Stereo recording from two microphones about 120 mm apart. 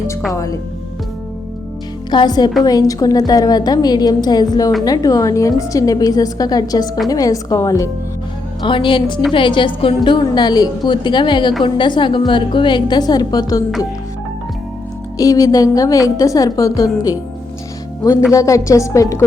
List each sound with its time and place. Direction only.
0.3 s a woman's voice: 30° left (ahead or behind)
2.0 s a woman's voice: 35° left (ahead or behind)
8.6 s a woman's voice: 45° left (ahead or behind)
15.2 s a woman's voice: 30° left (ahead or behind)
18.3 s a woman's voice: 25° left (ahead or behind)